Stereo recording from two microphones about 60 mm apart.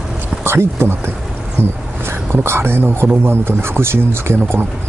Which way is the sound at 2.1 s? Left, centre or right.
Right.